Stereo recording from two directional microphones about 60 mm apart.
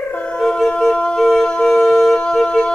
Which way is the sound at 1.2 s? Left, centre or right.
Centre.